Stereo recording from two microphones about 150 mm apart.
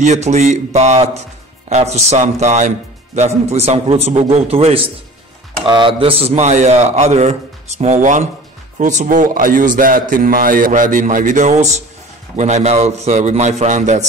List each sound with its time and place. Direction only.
0.0 s a man's voice: 50° right (ahead or behind)